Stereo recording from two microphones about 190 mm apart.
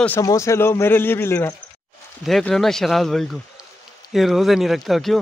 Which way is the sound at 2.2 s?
Centre (ahead or behind).